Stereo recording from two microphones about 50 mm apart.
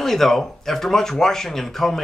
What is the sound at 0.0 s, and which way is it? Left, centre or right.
Speech, centre.